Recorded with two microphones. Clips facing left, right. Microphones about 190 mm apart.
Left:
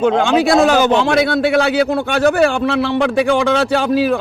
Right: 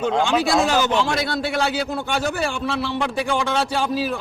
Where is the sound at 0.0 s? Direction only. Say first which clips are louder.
Left 6 dB; 60° left (ahead or behind).